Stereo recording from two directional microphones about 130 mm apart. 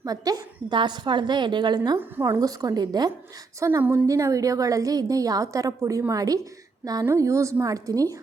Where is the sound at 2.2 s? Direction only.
25° right (ahead or behind).